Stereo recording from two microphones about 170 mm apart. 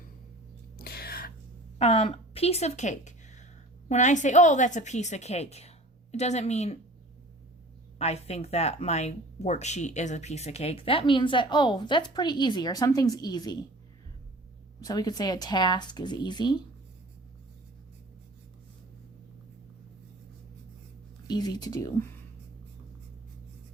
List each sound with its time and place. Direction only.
0.8 s a sound: 65° left (ahead or behind)
1.8 s a woman's voice: 35° left (ahead or behind)
7.9 s speech: 40° left (ahead or behind); by 13.6 s 25° left (ahead or behind)
14.8 s speech: 20° left (ahead or behind)
21.2 s speech: 25° left (ahead or behind)